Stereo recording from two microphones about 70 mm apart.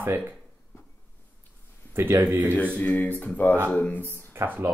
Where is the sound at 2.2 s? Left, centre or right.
Right.